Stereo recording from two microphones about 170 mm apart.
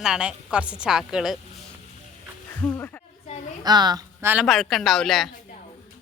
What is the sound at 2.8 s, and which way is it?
Speech, 10° left (ahead or behind).